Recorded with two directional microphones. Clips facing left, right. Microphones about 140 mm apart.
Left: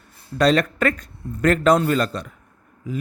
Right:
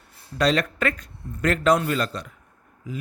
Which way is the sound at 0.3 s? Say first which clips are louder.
Left 4 dB; 45° left (ahead or behind).